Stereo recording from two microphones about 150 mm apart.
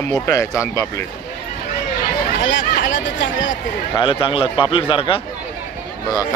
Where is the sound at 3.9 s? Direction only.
35° left (ahead or behind).